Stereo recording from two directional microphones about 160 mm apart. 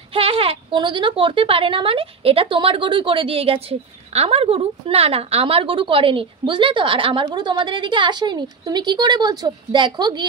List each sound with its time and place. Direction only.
0.1 s speech: 35° right (ahead or behind)